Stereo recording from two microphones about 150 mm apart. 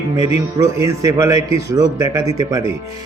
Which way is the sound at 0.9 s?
20° right (ahead or behind).